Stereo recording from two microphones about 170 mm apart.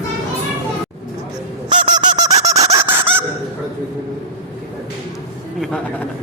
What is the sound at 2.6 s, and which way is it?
Squeal, 15° right (ahead or behind).